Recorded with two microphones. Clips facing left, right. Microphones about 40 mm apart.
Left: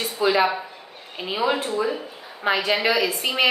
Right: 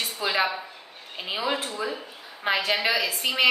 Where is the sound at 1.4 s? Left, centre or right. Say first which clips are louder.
Left 6 dB; centre.